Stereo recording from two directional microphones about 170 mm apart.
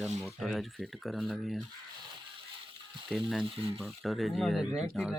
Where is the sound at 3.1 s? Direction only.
Centre (ahead or behind).